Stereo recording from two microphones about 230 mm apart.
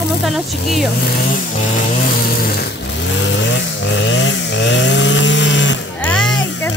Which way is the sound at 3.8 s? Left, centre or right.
Left.